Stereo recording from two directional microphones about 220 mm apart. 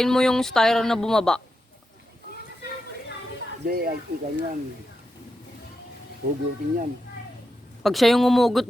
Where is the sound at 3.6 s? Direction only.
40° right (ahead or behind).